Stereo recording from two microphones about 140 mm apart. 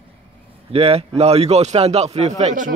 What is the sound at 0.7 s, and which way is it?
A man's voice, 45° right (ahead or behind).